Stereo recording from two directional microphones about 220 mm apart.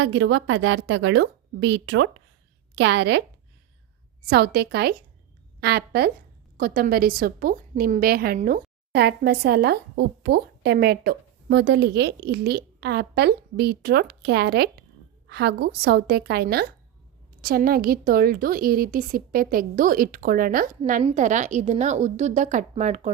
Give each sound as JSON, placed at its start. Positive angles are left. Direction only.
{"t": 0.0, "sound": "a woman's voice", "side_deg": -55}
{"t": 4.3, "sound": "a woman's voice", "side_deg": -45}